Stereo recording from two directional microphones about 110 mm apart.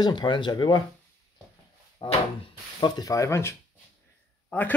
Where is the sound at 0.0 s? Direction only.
40° left (ahead or behind).